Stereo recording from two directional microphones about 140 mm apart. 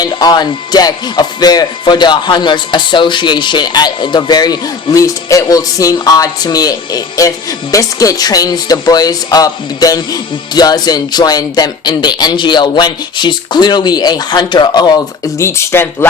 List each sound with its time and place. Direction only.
0.0 s speech: 30° left (ahead or behind)